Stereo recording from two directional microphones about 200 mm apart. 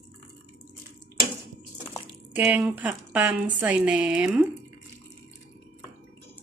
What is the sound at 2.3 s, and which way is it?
Speech, 10° right (ahead or behind).